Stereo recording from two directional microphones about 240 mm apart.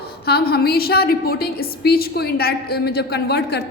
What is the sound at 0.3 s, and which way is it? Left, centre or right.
A woman's voice, left.